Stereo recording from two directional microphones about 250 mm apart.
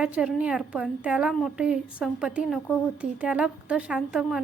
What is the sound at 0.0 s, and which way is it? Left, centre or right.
A woman's voice, centre.